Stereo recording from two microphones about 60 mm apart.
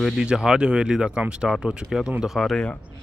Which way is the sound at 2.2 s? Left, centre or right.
Centre.